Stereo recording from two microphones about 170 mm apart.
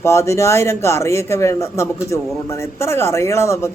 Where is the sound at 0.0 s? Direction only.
15° left (ahead or behind).